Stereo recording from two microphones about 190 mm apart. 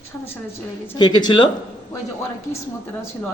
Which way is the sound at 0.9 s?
25° left (ahead or behind).